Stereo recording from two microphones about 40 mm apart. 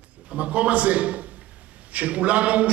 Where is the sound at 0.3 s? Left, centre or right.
Right.